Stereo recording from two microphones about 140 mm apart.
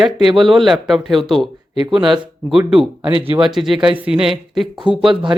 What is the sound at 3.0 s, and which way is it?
Speech, 40° right (ahead or behind).